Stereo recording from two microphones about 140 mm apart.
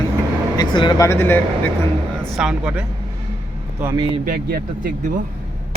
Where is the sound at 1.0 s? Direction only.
15° left (ahead or behind).